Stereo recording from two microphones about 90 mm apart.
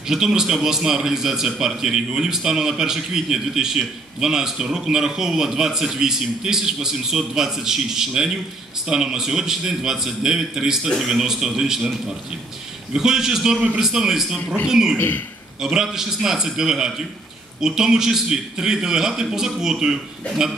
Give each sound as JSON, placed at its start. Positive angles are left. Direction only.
{"t": 0.0, "sound": "a man's voice", "side_deg": -5}
{"t": 15.0, "sound": "a man's voice", "side_deg": 20}
{"t": 15.6, "sound": "a man's voice", "side_deg": -5}